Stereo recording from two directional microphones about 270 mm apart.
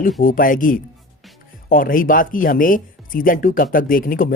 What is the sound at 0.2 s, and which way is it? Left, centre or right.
Speech, left.